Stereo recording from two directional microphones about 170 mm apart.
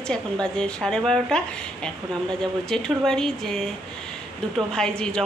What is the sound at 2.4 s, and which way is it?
A woman's voice, 5° left (ahead or behind).